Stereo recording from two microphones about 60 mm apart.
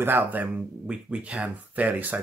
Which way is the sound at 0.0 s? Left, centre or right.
Right.